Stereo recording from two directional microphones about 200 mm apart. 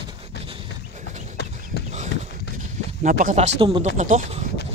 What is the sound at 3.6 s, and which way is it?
Speech, 25° right (ahead or behind).